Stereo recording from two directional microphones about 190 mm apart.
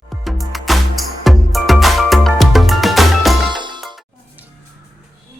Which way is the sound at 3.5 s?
25° right (ahead or behind).